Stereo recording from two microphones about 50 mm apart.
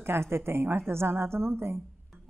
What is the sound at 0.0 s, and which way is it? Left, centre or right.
A woman's voice, right.